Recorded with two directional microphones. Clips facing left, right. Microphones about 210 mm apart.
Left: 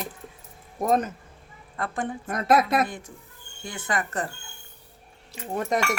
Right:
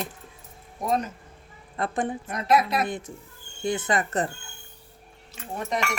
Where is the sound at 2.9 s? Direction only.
20° right (ahead or behind).